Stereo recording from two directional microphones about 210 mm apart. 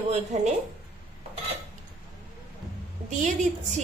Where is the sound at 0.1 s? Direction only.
35° right (ahead or behind).